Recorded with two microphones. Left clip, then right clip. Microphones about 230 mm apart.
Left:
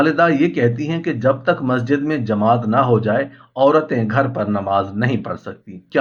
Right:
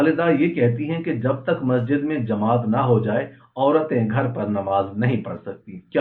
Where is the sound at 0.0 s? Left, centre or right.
Left.